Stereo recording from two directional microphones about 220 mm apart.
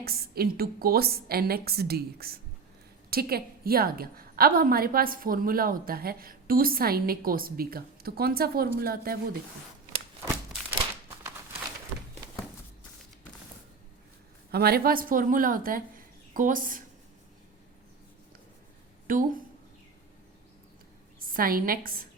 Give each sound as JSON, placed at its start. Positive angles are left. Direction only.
{"t": 0.0, "sound": "a woman's voice", "side_deg": -45}
{"t": 14.5, "sound": "speech", "side_deg": -45}
{"t": 19.0, "sound": "a woman's voice", "side_deg": -40}
{"t": 21.3, "sound": "a woman's voice", "side_deg": -40}